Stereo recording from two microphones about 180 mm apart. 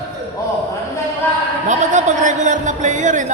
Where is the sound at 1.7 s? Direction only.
40° right (ahead or behind).